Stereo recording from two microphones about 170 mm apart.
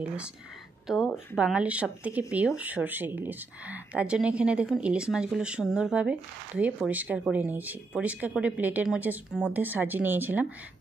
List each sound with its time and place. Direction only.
0.8 s speech: centre (ahead or behind)